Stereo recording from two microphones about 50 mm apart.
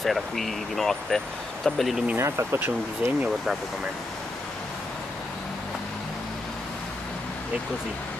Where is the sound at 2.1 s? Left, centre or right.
Right.